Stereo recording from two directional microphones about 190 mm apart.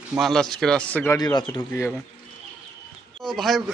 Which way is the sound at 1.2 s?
20° left (ahead or behind).